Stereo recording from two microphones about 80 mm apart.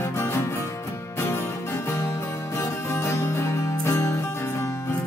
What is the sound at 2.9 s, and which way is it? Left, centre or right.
Music, left.